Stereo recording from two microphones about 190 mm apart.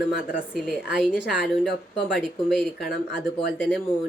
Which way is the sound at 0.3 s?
5° right (ahead or behind).